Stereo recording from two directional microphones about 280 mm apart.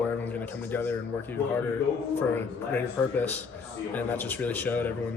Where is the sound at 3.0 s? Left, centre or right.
Centre.